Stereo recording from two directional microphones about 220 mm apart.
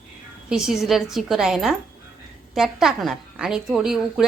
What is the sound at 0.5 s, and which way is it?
A woman's voice, centre (ahead or behind).